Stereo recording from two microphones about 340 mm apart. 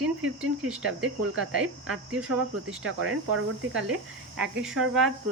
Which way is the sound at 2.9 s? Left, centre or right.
Right.